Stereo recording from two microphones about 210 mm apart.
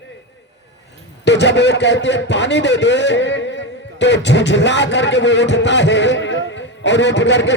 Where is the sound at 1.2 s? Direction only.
55° left (ahead or behind).